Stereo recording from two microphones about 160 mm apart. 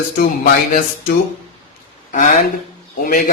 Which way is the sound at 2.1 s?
55° left (ahead or behind).